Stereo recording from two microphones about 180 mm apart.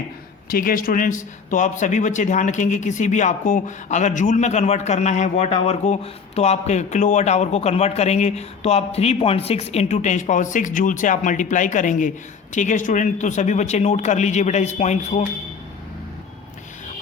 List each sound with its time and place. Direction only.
0.5 s speech: 50° left (ahead or behind)